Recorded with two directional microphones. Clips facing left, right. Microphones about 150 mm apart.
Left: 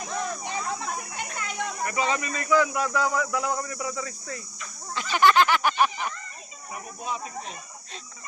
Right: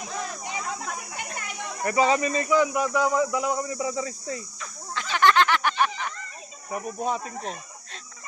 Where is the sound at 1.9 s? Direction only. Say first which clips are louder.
Right 9 dB; 35° right (ahead or behind).